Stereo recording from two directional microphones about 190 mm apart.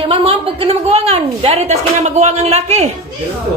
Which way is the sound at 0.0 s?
30° right (ahead or behind).